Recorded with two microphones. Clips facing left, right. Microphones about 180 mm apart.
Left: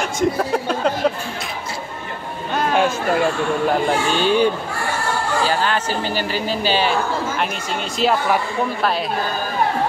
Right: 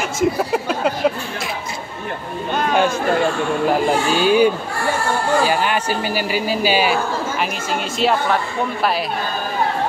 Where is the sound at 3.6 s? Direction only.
5° right (ahead or behind).